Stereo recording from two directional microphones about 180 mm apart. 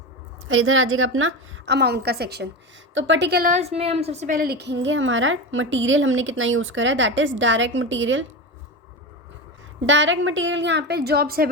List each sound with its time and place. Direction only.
0.4 s a woman's voice: 90° right; by 2.5 s 65° right (ahead or behind)
2.9 s a woman's voice: 90° right; by 3.5 s 65° right (ahead or behind)
3.5 s a woman's voice: 35° right (ahead or behind); by 8.2 s 90° right
9.8 s a woman's voice: 90° right; by 11.4 s 55° right (ahead or behind)